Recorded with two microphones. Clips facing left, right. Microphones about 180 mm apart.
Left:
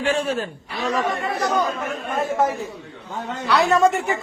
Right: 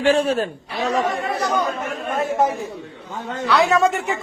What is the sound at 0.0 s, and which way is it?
Speech, 35° right (ahead or behind).